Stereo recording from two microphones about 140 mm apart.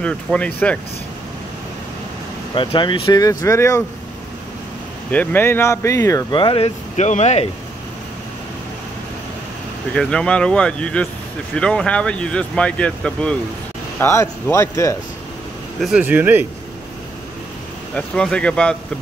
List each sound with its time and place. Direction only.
0.0 s speech: 10° left (ahead or behind)
2.5 s speech: 35° left (ahead or behind); by 3.8 s 20° left (ahead or behind)
5.1 s speech: 15° left (ahead or behind)
6.3 s speech: 40° left (ahead or behind); by 7.4 s 55° left (ahead or behind)
9.9 s speech: 5° left (ahead or behind)
13.9 s speech: 20° left (ahead or behind)
16.0 s speech: 15° right (ahead or behind)
17.9 s speech: 5° left (ahead or behind)